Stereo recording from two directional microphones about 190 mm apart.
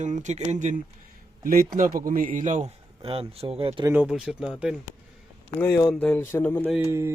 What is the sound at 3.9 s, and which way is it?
Speech, 5° right (ahead or behind).